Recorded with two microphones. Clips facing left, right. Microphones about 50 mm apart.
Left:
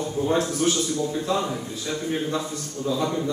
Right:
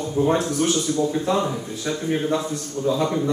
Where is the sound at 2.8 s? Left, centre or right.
Centre.